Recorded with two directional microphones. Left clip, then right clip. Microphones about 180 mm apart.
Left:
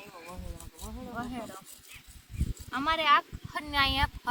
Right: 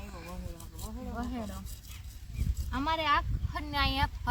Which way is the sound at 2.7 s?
10° right (ahead or behind).